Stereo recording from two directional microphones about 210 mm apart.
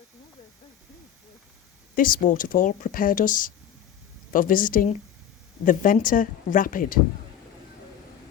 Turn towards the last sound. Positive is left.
turn(degrees=40)  # may be behind; listen again after turning